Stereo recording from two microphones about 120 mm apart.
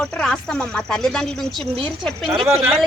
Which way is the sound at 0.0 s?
5° left (ahead or behind).